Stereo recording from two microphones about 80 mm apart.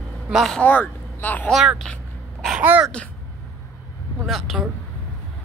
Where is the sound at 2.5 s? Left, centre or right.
Centre.